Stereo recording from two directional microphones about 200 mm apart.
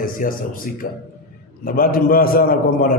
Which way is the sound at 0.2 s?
45° left (ahead or behind).